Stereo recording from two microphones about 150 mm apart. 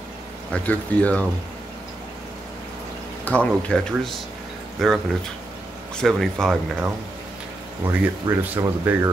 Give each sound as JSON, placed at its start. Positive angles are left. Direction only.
{"t": 0.5, "sound": "speech", "side_deg": 10}
{"t": 3.3, "sound": "speech", "side_deg": 10}
{"t": 7.8, "sound": "speech", "side_deg": -15}